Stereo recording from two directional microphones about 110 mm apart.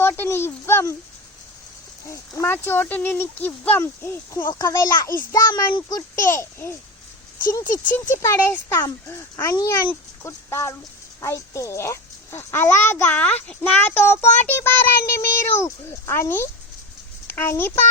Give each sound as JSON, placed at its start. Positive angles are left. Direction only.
{"t": 0.0, "sound": "speech", "side_deg": 20}
{"t": 2.0, "sound": "speech", "side_deg": 25}
{"t": 4.4, "sound": "a child's voice", "side_deg": 40}